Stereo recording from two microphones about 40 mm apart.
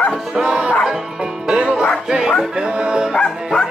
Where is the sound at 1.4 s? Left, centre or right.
Right.